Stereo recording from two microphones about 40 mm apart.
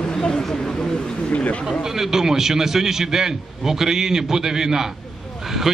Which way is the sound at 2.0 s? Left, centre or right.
Centre.